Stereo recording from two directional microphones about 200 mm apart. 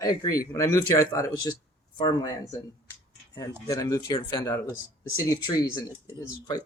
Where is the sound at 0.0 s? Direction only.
20° left (ahead or behind).